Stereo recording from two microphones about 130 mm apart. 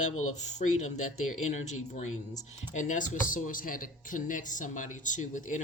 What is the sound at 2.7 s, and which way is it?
Speech, 75° left (ahead or behind).